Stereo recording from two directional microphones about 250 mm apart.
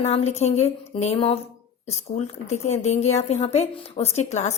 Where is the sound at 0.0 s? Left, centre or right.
Left.